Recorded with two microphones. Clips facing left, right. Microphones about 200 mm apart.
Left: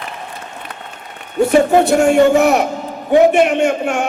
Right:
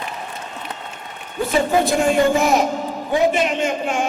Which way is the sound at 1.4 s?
70° left (ahead or behind).